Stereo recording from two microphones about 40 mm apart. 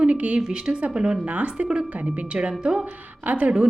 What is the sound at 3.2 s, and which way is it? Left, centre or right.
Speech, right.